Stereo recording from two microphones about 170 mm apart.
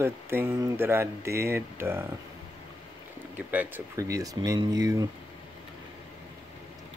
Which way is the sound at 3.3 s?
10° right (ahead or behind).